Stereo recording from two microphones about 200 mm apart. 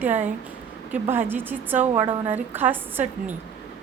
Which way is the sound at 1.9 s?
25° right (ahead or behind).